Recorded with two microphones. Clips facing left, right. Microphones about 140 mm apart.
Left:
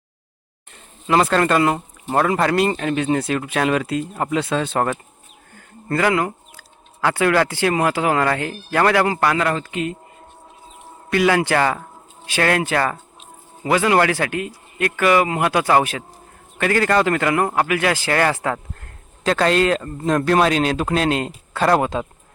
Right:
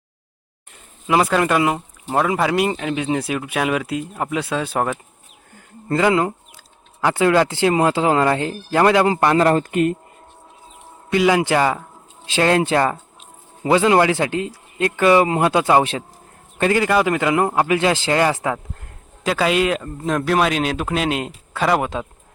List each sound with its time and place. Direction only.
1.0 s a man's voice: 10° right (ahead or behind)
5.5 s speech: 20° right (ahead or behind)
9.5 s speech: 45° right (ahead or behind)
11.1 s speech: 15° right (ahead or behind)
16.7 s a man's voice: 10° right (ahead or behind)